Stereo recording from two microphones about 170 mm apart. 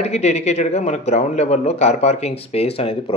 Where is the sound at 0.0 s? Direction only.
40° left (ahead or behind).